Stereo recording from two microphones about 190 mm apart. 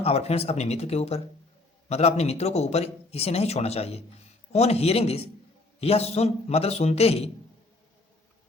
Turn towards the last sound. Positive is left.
turn(degrees=35)  # may be behind; listen again after turning